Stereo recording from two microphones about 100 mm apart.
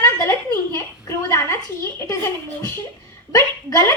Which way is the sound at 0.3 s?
25° left (ahead or behind).